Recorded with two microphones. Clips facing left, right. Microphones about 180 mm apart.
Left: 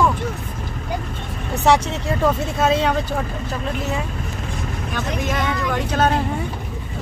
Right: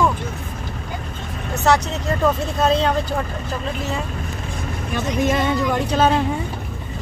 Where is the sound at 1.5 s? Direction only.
15° left (ahead or behind).